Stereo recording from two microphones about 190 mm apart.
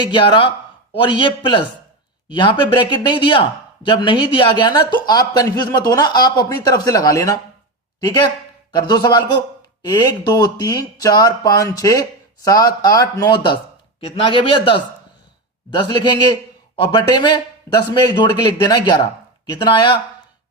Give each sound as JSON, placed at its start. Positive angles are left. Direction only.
{"t": 0.0, "sound": "speech", "side_deg": 25}